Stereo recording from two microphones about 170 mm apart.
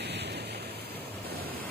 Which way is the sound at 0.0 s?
75° right (ahead or behind).